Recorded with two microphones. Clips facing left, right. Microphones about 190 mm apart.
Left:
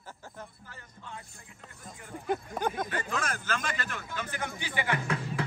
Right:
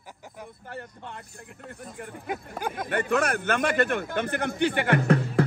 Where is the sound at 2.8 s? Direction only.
65° right (ahead or behind).